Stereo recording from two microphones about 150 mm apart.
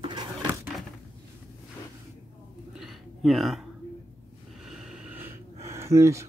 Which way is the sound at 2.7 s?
Centre (ahead or behind).